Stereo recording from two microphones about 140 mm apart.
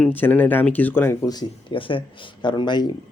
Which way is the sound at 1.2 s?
30° left (ahead or behind).